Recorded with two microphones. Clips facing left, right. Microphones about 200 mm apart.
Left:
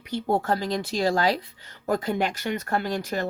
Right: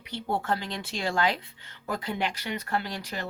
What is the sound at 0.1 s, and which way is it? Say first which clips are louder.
Speech: left 5 dB; 45° left (ahead or behind).